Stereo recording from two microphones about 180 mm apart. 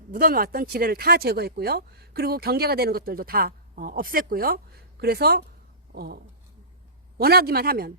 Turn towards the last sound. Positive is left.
turn(degrees=-60)  # may be behind; listen again after turning